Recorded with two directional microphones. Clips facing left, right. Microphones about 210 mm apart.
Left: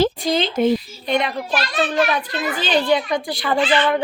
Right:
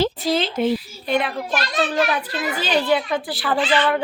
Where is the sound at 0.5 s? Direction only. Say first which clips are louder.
Left 3 dB; 45° left (ahead or behind).